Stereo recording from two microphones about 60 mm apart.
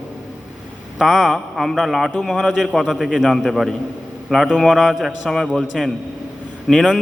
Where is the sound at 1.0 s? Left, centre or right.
Centre.